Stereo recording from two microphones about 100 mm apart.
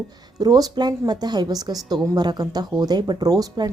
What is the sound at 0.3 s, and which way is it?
A woman's voice, 40° right (ahead or behind).